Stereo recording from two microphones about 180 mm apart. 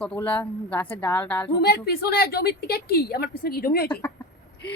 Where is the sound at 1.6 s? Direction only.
60° left (ahead or behind).